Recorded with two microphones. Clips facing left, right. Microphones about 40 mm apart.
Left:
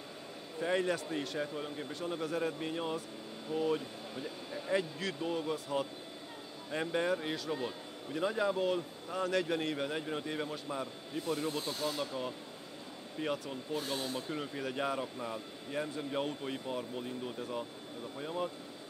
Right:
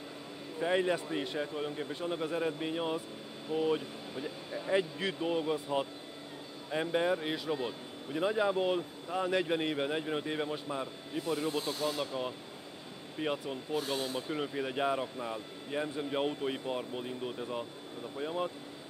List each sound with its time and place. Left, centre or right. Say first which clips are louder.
0.6 s speech: right 2 dB; centre
6.7 s speech: right 2 dB; centre
13.7 s speech: right 3 dB; centre